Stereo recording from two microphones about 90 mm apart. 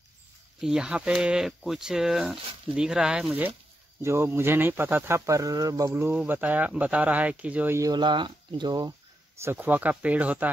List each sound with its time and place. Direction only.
0.6 s speech: 5° right (ahead or behind)
4.0 s speech: 30° right (ahead or behind)
6.2 s speech: 20° right (ahead or behind)
7.9 s speech: 60° right (ahead or behind)
9.4 s speech: 25° right (ahead or behind)